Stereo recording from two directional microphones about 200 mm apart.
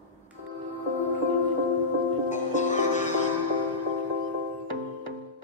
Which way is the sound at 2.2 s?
35° left (ahead or behind).